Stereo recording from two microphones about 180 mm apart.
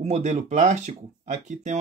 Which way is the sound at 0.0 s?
40° right (ahead or behind).